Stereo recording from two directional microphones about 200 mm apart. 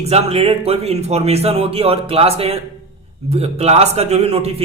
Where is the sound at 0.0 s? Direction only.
30° right (ahead or behind).